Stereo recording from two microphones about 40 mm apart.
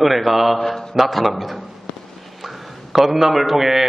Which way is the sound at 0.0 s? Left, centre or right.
Centre.